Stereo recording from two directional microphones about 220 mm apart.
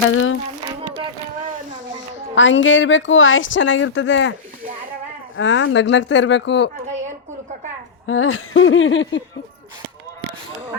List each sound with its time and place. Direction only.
0.1 s a sound: 65° left (ahead or behind)
2.3 s a woman's voice: 60° left (ahead or behind)
5.4 s a woman's voice: 60° left (ahead or behind)
8.0 s a woman's voice: 65° left (ahead or behind)